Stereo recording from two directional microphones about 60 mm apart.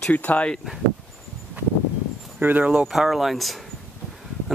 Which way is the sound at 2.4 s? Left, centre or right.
Right.